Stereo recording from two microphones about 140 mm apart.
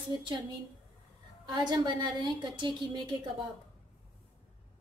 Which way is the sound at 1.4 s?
30° right (ahead or behind).